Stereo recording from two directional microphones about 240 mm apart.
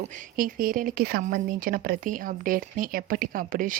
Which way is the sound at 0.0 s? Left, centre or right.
Right.